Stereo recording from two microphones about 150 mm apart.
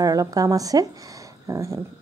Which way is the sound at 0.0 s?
25° right (ahead or behind).